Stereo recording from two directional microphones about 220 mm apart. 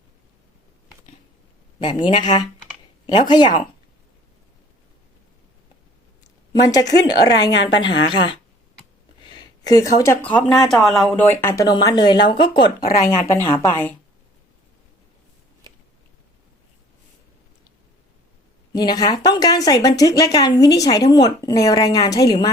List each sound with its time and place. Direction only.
1.8 s speech: 20° left (ahead or behind)
2.2 s speech: 35° left (ahead or behind)
3.1 s speech: 20° left (ahead or behind)
6.5 s speech: 15° left (ahead or behind)
7.5 s a woman's voice: 55° left (ahead or behind)
7.8 s speech: 20° left (ahead or behind)
13.1 s speech: 15° left (ahead or behind)
18.7 s speech: 20° left (ahead or behind)